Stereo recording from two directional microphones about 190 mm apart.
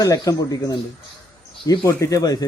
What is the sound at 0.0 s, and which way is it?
Speech, 20° left (ahead or behind).